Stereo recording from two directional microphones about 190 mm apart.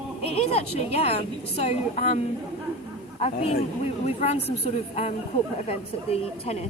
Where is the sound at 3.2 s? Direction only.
35° left (ahead or behind).